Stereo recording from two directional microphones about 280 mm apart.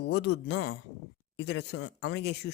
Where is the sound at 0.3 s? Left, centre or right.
Left.